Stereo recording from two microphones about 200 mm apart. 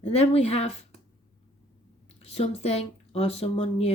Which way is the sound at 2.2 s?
30° left (ahead or behind).